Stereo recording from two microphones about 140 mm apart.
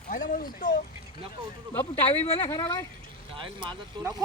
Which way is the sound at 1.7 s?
15° left (ahead or behind).